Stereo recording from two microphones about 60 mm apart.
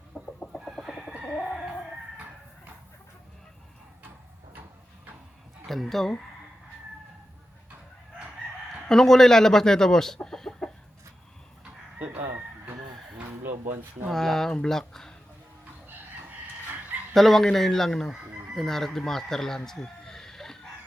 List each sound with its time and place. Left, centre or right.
0.1 s chicken: centre
0.6 s chicken: centre
5.6 s speech: centre
8.9 s speech: centre
10.2 s chicken: centre
11.9 s chicken: right
13.4 s a sound: right
14.1 s speech: centre
17.2 s speech: centre